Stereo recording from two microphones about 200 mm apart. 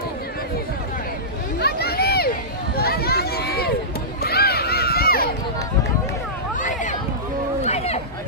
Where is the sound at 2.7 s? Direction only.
50° left (ahead or behind).